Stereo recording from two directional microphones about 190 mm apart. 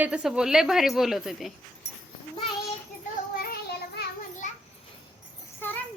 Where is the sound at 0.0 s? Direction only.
5° right (ahead or behind).